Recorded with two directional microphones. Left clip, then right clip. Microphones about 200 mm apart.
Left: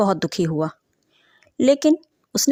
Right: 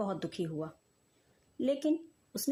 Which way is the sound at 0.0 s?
40° left (ahead or behind).